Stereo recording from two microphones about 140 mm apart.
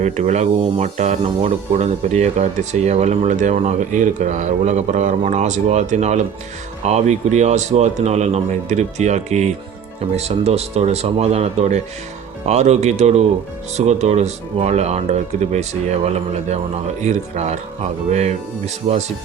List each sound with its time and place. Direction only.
0.0 s speech: 55° right (ahead or behind)